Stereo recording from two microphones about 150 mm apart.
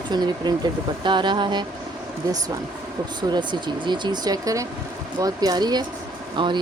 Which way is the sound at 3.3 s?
30° right (ahead or behind).